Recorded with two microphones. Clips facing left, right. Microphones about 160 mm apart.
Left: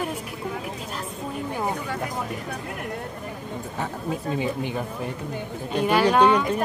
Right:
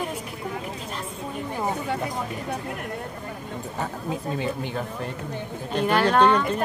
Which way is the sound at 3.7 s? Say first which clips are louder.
Left 1 dB; centre (ahead or behind).